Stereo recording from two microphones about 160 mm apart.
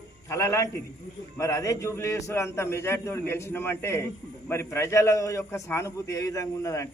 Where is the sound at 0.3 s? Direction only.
20° left (ahead or behind).